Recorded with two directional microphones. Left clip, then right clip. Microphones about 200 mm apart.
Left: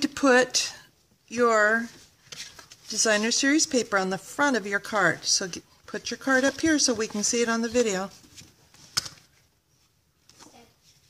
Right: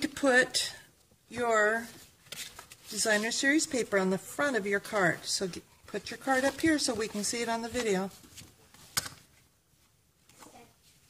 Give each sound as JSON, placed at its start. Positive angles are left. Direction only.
{"t": 0.0, "sound": "speech", "side_deg": 40}
{"t": 2.9, "sound": "speech", "side_deg": 40}